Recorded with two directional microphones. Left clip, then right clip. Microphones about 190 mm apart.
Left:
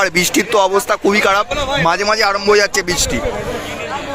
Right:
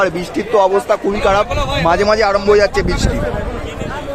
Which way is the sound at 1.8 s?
5° right (ahead or behind).